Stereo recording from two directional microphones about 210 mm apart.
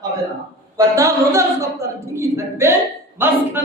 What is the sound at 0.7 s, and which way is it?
A woman's voice, 15° right (ahead or behind).